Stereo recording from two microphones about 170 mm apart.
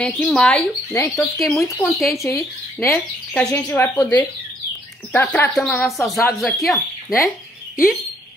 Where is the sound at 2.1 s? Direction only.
15° left (ahead or behind).